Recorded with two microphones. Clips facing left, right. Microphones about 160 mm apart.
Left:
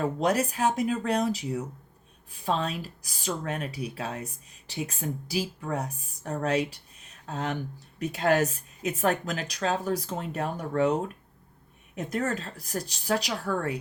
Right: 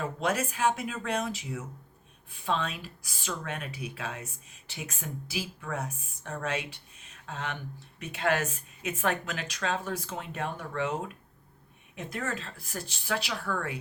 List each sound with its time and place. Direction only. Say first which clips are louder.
0.0 s speech: left 5 dB; 35° left (ahead or behind)
11.9 s speech: left 6 dB; 40° left (ahead or behind)